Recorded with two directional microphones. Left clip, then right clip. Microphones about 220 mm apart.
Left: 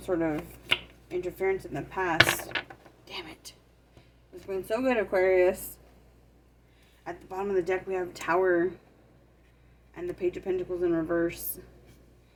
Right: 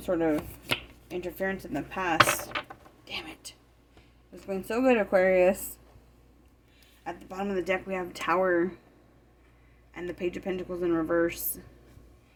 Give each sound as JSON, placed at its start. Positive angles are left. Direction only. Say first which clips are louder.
{"t": 0.0, "sound": "speech", "louder": "right 2 dB", "side_deg": -50}
{"t": 3.1, "sound": "a sound", "louder": "right 2 dB", "side_deg": -45}
{"t": 4.4, "sound": "speech", "louder": "right 3 dB", "side_deg": -40}
{"t": 7.0, "sound": "speech", "louder": "left 1 dB", "side_deg": -50}
{"t": 9.9, "sound": "speech", "louder": "left 2 dB", "side_deg": -55}